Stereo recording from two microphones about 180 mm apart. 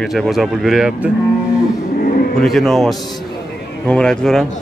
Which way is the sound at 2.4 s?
Centre (ahead or behind).